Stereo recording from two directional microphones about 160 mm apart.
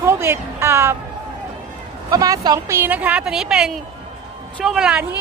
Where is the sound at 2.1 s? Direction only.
20° right (ahead or behind).